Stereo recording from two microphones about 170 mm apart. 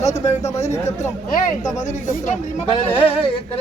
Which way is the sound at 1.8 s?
45° left (ahead or behind).